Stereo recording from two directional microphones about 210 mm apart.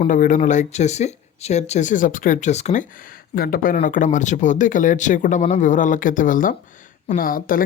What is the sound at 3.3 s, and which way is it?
Speech, 45° left (ahead or behind).